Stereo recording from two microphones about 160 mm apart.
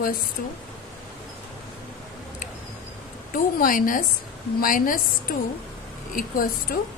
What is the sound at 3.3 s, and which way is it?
A woman's voice, 60° left (ahead or behind).